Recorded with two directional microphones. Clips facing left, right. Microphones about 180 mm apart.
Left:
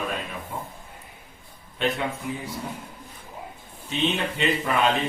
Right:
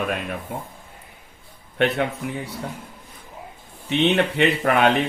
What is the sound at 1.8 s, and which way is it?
Speech, 65° right (ahead or behind).